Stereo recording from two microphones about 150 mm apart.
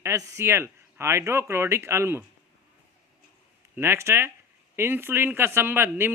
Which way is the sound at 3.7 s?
15° right (ahead or behind).